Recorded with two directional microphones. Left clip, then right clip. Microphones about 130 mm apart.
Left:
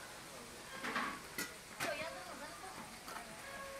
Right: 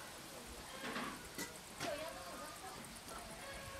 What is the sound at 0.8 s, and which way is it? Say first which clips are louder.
Frying: left 5 dB; 30° left (ahead or behind).